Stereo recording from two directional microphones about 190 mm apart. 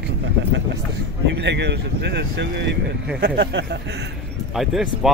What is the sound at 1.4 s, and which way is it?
Speech, 65° right (ahead or behind).